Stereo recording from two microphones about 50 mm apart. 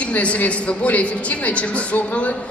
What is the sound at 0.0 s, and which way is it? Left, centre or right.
A woman's voice, left.